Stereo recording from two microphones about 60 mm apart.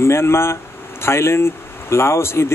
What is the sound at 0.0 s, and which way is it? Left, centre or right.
A man's voice, left.